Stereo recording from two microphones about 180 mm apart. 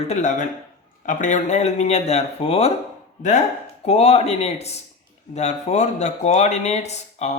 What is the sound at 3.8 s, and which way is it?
Speech, 35° left (ahead or behind).